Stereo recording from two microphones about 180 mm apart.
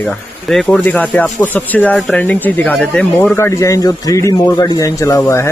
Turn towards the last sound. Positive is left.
turn(degrees=15)  # may be behind; listen again after turning